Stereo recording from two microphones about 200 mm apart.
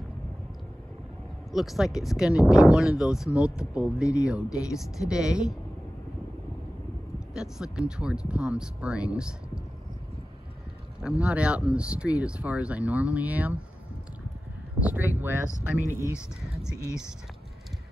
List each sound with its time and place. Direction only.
1.5 s speech: centre (ahead or behind)
7.3 s speech: 5° right (ahead or behind)
11.0 s speech: 5° right (ahead or behind)
14.8 s speech: 10° right (ahead or behind)
15.5 s speech: 15° left (ahead or behind)